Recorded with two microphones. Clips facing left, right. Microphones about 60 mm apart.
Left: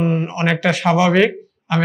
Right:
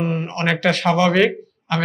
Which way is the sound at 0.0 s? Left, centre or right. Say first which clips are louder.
Left 3 dB; centre.